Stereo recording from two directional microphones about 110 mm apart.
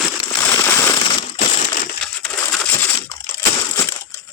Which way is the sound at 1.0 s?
55° left (ahead or behind).